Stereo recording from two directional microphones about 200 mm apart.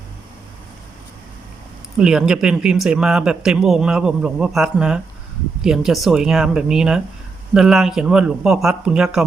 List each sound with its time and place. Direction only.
2.0 s speech: 5° right (ahead or behind)